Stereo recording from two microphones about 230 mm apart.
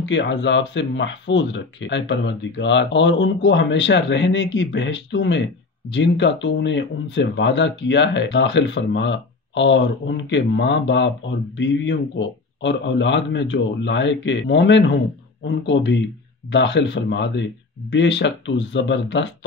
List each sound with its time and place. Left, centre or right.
0.0 s speech: left